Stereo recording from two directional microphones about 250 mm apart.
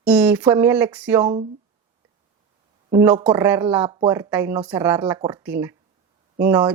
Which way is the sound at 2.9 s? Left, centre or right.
Centre.